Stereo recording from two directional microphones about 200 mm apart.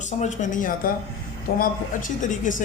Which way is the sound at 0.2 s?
40° left (ahead or behind).